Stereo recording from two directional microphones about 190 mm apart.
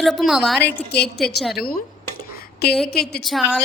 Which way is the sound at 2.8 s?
55° left (ahead or behind).